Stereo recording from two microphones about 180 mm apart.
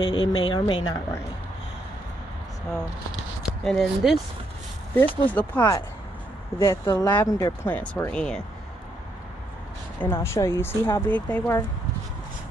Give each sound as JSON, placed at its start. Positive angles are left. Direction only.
{"t": 0.0, "sound": "speech", "side_deg": 25}
{"t": 3.6, "sound": "speech", "side_deg": 0}
{"t": 4.9, "sound": "speech", "side_deg": 10}
{"t": 5.6, "sound": "speech", "side_deg": 20}
{"t": 9.9, "sound": "speech", "side_deg": 10}